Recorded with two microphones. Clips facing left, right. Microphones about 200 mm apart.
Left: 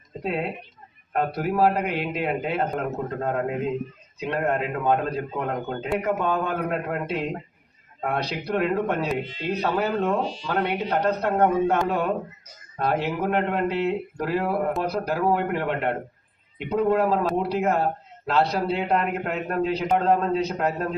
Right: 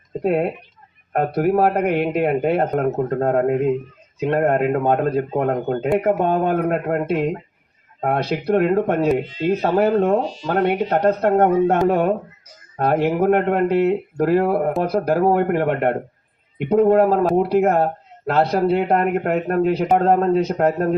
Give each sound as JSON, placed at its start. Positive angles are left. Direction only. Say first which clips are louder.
{"t": 0.2, "sound": "speech", "louder": "right 8 dB", "side_deg": -50}
{"t": 8.0, "sound": "speech", "louder": "right 7 dB", "side_deg": -50}